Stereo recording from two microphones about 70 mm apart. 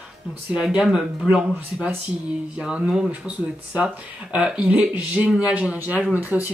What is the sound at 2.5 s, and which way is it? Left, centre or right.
Speech, centre.